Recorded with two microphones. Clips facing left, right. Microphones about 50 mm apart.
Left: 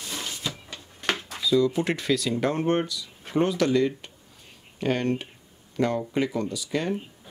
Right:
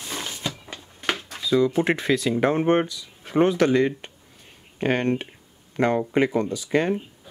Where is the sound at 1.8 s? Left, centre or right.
Right.